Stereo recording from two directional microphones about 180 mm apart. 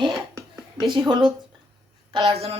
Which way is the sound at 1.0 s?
25° right (ahead or behind).